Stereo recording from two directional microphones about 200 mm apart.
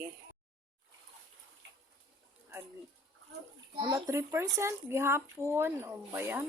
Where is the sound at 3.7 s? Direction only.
25° right (ahead or behind).